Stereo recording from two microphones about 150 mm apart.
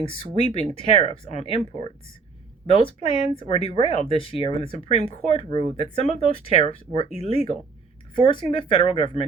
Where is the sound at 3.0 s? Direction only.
35° left (ahead or behind).